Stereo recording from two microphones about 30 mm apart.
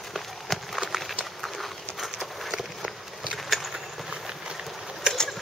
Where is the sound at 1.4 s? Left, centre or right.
Centre.